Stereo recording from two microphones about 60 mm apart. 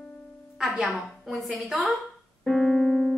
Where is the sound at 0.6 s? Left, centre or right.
Centre.